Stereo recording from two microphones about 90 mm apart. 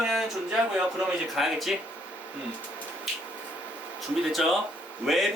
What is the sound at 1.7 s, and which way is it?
Speech, 10° right (ahead or behind).